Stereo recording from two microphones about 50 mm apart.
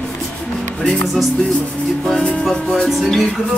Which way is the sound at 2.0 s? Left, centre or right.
Centre.